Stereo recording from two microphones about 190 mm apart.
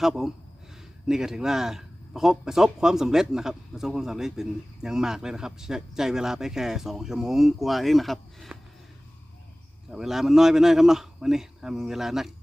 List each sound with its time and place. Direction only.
0.0 s a man's voice: centre (ahead or behind)
9.9 s a man's voice: centre (ahead or behind)